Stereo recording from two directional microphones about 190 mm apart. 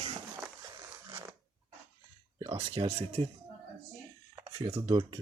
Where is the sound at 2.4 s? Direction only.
30° right (ahead or behind).